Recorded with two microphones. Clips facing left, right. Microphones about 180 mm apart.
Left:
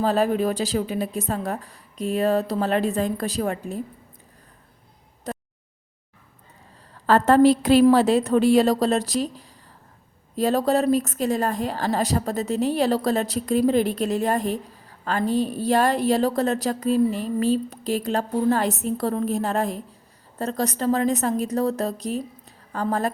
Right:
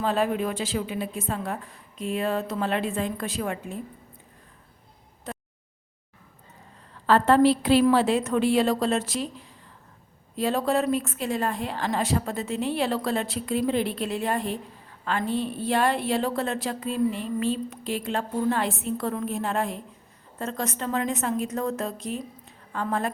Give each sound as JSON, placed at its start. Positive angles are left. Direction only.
{"t": 0.0, "sound": "a woman's voice", "side_deg": 40}
{"t": 5.3, "sound": "a sound", "side_deg": 40}
{"t": 7.1, "sound": "a woman's voice", "side_deg": 40}